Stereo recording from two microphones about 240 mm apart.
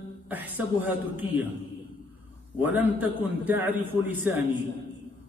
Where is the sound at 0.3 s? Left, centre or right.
Centre.